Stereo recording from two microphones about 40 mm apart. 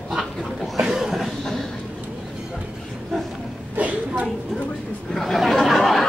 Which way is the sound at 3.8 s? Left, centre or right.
Right.